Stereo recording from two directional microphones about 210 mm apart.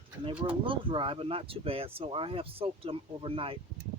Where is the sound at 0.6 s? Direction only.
25° right (ahead or behind).